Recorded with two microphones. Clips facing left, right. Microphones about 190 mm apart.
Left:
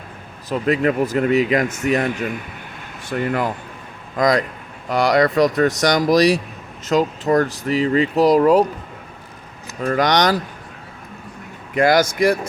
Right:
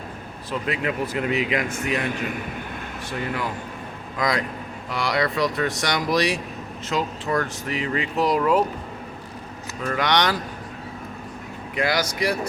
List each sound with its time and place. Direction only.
0.5 s speech: 45° left (ahead or behind)
3.1 s speech: 55° left (ahead or behind)
4.2 s speech: 45° left (ahead or behind)
9.8 s speech: 40° left (ahead or behind)
11.7 s speech: 45° left (ahead or behind)